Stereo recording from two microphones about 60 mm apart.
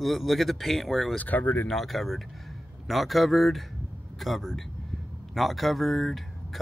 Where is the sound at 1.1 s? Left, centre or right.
Left.